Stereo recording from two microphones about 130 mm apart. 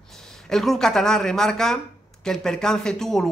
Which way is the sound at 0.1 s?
5° left (ahead or behind).